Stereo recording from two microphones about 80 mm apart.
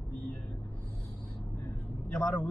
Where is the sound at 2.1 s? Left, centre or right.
Left.